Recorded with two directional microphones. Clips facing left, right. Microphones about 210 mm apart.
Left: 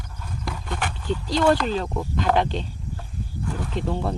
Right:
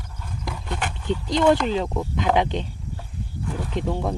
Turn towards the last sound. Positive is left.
turn(degrees=-15)  # may be behind; listen again after turning